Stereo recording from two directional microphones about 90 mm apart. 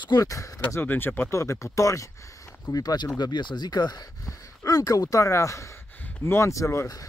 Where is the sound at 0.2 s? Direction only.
40° left (ahead or behind).